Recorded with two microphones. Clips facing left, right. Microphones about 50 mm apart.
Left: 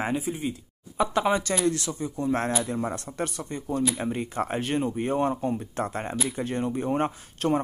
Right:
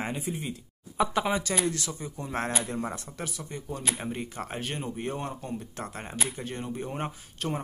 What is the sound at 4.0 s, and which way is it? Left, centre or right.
Speech, centre.